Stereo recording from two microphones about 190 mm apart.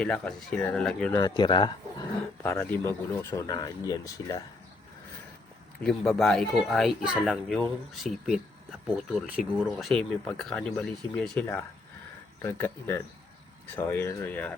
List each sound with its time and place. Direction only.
0.0 s speech: 5° left (ahead or behind)
1.1 s speech: 20° left (ahead or behind)
2.4 s speech: 15° left (ahead or behind)
5.8 s speech: centre (ahead or behind)
9.7 s speech: 5° left (ahead or behind)